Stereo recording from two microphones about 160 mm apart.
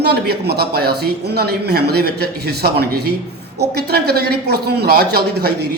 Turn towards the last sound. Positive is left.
turn(degrees=-85)